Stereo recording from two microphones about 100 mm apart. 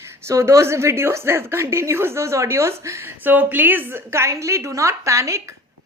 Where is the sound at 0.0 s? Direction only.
25° right (ahead or behind).